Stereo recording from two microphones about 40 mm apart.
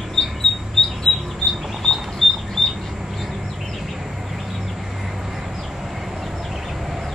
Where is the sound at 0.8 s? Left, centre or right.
Centre.